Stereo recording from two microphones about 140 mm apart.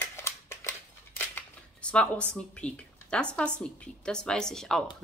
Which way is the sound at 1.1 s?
10° left (ahead or behind).